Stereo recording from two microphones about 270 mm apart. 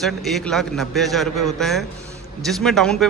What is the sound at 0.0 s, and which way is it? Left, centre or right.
Speech, centre.